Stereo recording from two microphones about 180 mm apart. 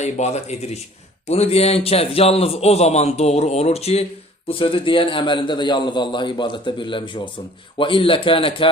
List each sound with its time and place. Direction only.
0.0 s a man's voice: 40° left (ahead or behind)